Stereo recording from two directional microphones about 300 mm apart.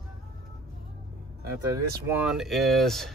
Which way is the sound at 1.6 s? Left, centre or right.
Centre.